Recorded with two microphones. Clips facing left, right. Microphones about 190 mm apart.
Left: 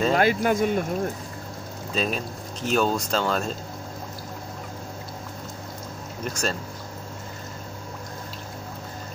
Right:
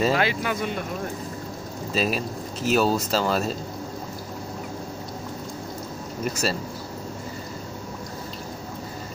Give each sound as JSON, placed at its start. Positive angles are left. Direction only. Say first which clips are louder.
{"t": 0.1, "sound": "speech", "louder": "left 3 dB", "side_deg": 45}
{"t": 2.0, "sound": "speech", "louder": "right 2 dB", "side_deg": -5}
{"t": 6.2, "sound": "speech", "louder": "right 2 dB", "side_deg": -5}